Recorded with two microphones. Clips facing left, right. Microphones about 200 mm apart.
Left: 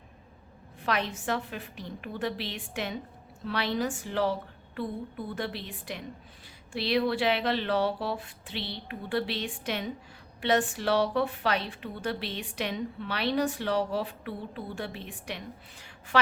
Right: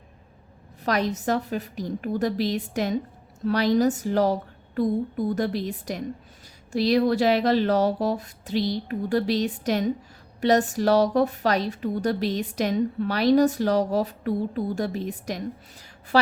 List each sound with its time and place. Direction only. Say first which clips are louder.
0.8 s a woman's voice: right 6 dB; 40° right (ahead or behind)